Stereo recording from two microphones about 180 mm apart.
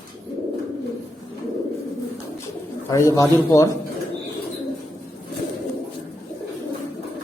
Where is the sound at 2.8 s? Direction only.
15° left (ahead or behind).